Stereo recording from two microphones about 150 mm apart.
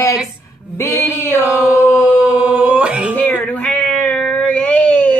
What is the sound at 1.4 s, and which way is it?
Male singing, 10° right (ahead or behind).